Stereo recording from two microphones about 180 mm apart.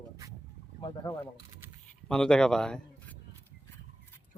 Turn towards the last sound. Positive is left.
turn(degrees=5)  # may be behind; listen again after turning